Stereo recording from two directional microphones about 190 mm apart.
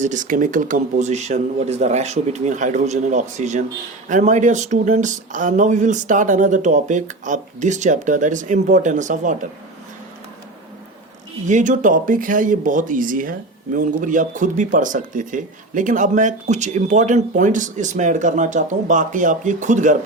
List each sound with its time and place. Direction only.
0.0 s speech: 40° right (ahead or behind)
11.4 s speech: 40° right (ahead or behind)